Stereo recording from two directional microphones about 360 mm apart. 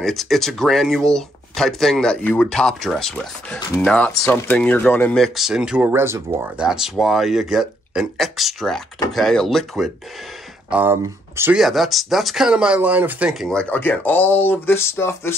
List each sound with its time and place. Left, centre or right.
0.0 s speech: centre